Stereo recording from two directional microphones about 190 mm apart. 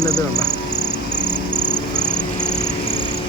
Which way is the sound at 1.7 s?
5° left (ahead or behind).